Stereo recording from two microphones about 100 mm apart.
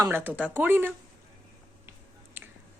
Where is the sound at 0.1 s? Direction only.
20° right (ahead or behind).